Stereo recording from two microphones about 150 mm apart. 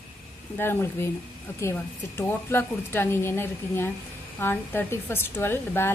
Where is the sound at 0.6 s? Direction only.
15° left (ahead or behind).